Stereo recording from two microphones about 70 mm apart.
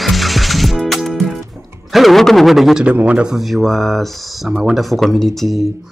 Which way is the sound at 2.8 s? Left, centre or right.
Centre.